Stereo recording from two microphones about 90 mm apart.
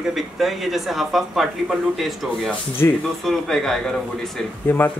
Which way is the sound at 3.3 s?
5° left (ahead or behind).